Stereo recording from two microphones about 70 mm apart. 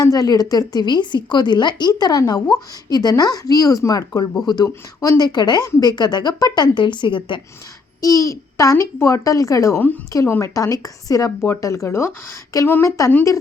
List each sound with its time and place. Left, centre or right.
0.0 s a woman's voice: left
5.2 s speech: left
8.0 s a child's voice: left
11.3 s speech: left
12.5 s a child's voice: left